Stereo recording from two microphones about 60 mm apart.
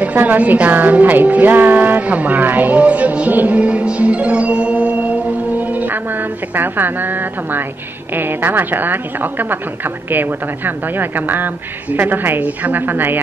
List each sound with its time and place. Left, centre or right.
0.0 s a woman's voice: right